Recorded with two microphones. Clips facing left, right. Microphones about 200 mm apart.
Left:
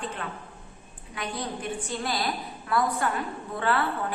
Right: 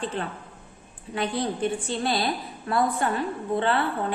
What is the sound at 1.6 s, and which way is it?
A woman's voice, 30° right (ahead or behind).